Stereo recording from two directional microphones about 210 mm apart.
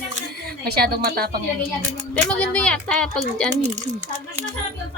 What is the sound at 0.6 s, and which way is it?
Speech, 45° right (ahead or behind).